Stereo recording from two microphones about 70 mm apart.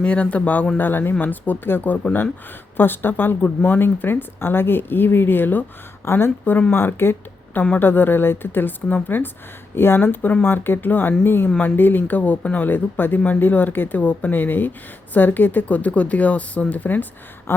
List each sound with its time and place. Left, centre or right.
0.0 s speech: centre
11.4 s speech: centre
11.8 s speech: left